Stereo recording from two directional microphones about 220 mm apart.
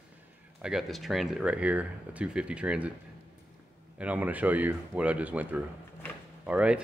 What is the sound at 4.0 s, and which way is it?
Speech, 5° right (ahead or behind).